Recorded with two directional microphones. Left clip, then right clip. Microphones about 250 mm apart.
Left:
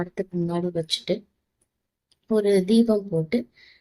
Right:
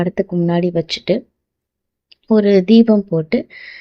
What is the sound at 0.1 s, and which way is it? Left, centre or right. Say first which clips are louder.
Speech: right 10 dB; right.